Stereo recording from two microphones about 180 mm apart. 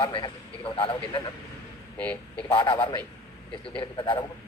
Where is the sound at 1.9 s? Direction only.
10° left (ahead or behind).